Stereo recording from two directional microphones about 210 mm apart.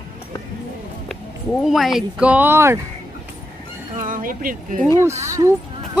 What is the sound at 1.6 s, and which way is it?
Speech, centre (ahead or behind).